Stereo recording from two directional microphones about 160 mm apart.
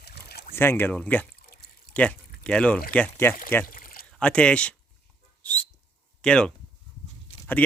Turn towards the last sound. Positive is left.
turn(degrees=10)  # may be behind; listen again after turning